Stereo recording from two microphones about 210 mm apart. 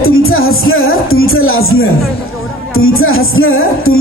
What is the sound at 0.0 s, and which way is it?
A man's voice, 80° left.